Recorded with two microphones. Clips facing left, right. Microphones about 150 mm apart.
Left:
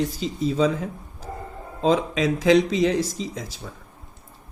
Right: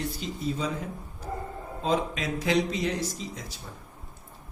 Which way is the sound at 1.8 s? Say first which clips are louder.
Left 7 dB; 90° left.